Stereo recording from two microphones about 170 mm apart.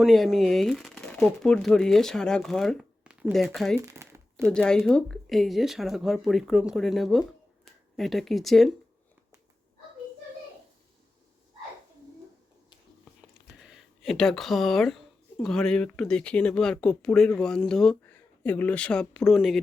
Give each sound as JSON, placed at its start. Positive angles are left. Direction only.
{"t": 0.0, "sound": "speech", "side_deg": 0}
{"t": 3.8, "sound": "crumpling", "side_deg": -15}
{"t": 4.4, "sound": "speech", "side_deg": 5}
{"t": 13.2, "sound": "speech", "side_deg": 0}